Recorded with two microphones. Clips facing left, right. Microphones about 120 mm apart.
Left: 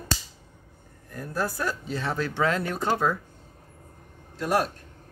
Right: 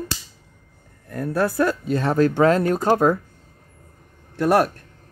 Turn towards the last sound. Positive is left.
turn(degrees=-65)  # may be behind; listen again after turning